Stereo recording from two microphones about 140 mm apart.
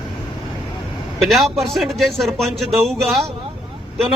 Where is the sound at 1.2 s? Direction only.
Centre (ahead or behind).